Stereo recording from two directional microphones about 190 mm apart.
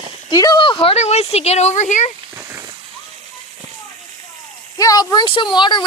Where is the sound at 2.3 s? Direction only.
15° right (ahead or behind).